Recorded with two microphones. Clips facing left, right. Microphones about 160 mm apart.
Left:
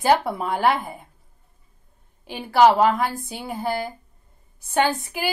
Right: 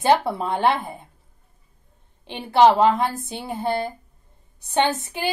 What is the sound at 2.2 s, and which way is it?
Speech, 25° right (ahead or behind).